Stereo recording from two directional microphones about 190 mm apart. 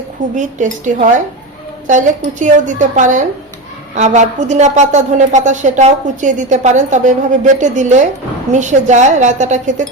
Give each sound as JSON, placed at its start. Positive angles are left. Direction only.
{"t": 0.3, "sound": "a woman's voice", "side_deg": -40}